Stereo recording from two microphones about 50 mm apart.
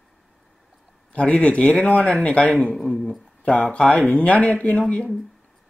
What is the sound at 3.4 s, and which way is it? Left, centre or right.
Speech, left.